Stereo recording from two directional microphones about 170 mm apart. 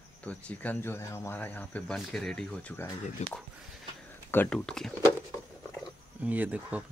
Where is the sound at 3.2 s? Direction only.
45° left (ahead or behind).